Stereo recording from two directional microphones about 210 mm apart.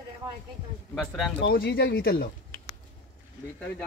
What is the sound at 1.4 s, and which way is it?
Speech, 50° left (ahead or behind).